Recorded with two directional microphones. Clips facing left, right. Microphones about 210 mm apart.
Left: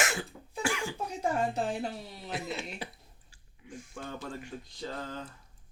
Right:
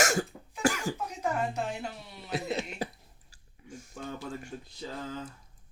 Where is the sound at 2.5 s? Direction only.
40° right (ahead or behind).